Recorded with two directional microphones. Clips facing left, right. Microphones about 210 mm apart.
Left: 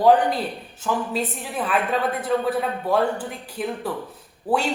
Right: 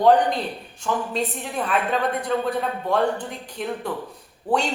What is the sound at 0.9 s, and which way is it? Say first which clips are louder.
A man's voice: even; 5° left (ahead or behind).